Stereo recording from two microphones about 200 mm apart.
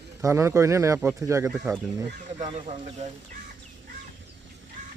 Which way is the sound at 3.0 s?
35° right (ahead or behind).